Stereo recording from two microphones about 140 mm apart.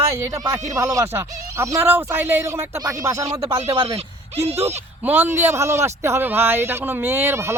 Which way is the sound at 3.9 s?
50° right (ahead or behind).